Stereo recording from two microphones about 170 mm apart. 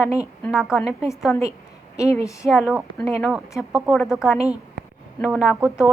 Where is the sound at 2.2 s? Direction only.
20° left (ahead or behind).